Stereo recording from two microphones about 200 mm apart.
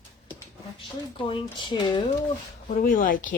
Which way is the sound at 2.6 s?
40° left (ahead or behind).